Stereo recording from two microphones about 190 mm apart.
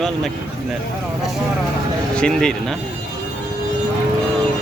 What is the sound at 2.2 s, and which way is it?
Speech, 5° left (ahead or behind).